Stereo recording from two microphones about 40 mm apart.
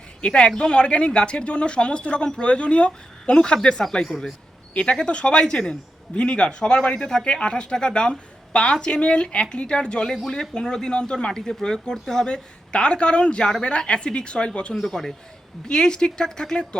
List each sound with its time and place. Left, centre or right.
0.3 s speech: left
14.8 s a man's voice: centre